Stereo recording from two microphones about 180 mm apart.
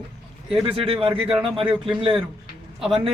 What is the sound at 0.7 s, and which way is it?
A man's voice, 30° right (ahead or behind).